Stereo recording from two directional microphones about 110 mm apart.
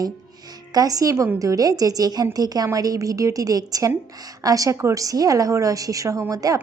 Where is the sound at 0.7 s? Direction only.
35° right (ahead or behind).